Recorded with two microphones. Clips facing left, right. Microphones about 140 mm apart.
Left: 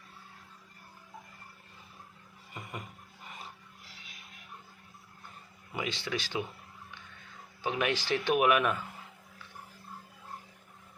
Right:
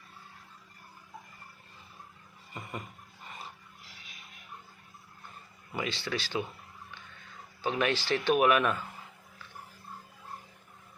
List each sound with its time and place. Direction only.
5.7 s speech: 15° left (ahead or behind)
7.6 s speech: 15° left (ahead or behind)